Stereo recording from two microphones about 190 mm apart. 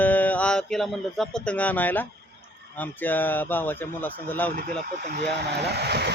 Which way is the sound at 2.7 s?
10° left (ahead or behind).